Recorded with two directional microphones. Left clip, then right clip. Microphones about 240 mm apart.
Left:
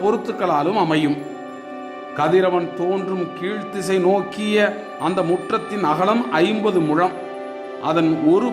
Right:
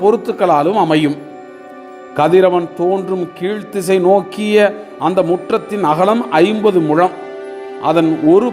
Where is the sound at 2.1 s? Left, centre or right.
Centre.